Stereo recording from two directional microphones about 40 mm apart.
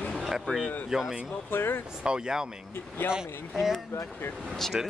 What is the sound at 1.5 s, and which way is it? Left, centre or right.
Speech, left.